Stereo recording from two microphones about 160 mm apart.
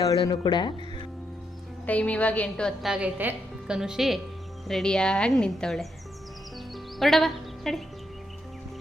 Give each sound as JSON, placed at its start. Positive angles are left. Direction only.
{"t": 0.0, "sound": "speech", "side_deg": 25}
{"t": 1.9, "sound": "a woman's voice", "side_deg": 10}
{"t": 7.0, "sound": "speech", "side_deg": 0}